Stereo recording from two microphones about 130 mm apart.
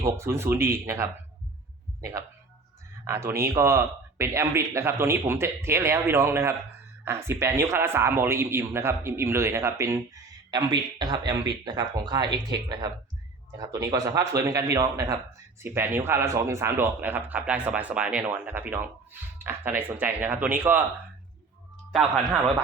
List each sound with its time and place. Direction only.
0.0 s a man's voice: 20° right (ahead or behind)
21.9 s speech: centre (ahead or behind)